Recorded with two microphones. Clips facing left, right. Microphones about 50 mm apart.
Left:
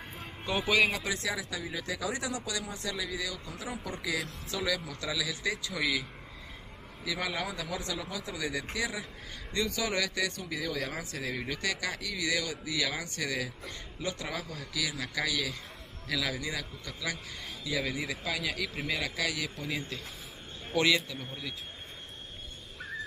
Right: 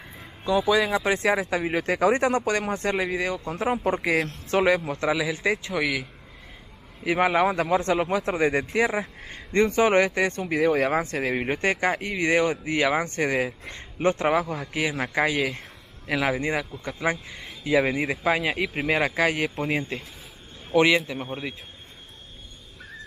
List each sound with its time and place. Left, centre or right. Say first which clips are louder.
1.0 s speech: right 11 dB; right
7.1 s a man's voice: right 13 dB; right
20.7 s a man's voice: right 8 dB; right